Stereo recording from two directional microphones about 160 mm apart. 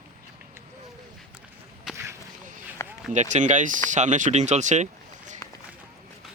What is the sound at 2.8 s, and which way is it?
Run, 15° left (ahead or behind).